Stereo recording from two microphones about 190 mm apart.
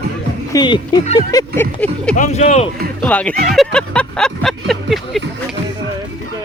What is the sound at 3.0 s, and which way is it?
Speech, 5° left (ahead or behind).